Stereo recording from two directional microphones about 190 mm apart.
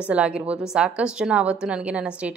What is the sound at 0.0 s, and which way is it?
A woman's voice, 5° right (ahead or behind).